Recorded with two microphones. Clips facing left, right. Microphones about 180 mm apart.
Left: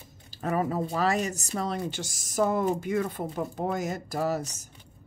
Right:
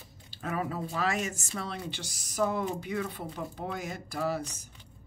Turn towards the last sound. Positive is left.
turn(degrees=45)  # may be behind; listen again after turning